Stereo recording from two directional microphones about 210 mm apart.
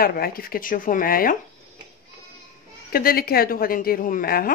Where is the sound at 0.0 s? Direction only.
45° left (ahead or behind).